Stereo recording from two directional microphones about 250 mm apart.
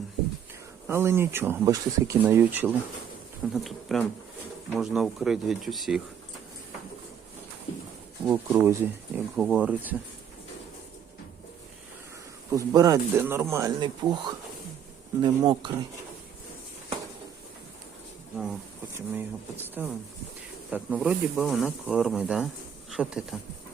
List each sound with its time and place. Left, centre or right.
0.9 s a man's voice: centre
8.3 s speech: centre
12.5 s a man's voice: centre
18.9 s a man's voice: centre